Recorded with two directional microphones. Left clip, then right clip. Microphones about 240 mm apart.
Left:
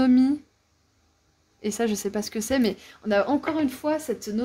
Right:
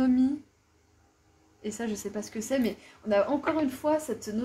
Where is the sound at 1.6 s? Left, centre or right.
Left.